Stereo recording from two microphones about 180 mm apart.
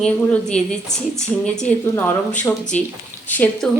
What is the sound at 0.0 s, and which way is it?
Speech, 5° left (ahead or behind).